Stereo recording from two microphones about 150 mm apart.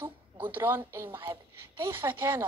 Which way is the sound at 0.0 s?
15° right (ahead or behind).